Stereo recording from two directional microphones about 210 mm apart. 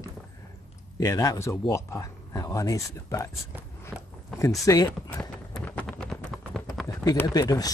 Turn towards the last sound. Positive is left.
turn(degrees=15)  # may be behind; listen again after turning